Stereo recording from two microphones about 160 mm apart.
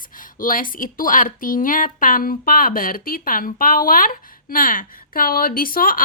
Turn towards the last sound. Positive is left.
turn(degrees=65)  # may be behind; listen again after turning